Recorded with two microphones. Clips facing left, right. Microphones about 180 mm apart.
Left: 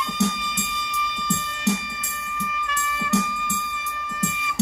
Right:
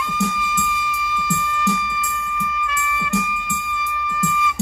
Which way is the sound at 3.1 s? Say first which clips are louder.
Left 3 dB; 70° left (ahead or behind).